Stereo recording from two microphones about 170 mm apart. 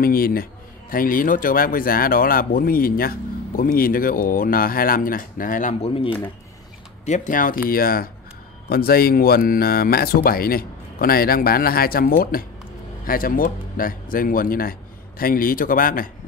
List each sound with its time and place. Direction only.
0.0 s a man's voice: 60° left (ahead or behind)
5.8 s speech: 35° left (ahead or behind)
7.1 s a man's voice: 50° left (ahead or behind)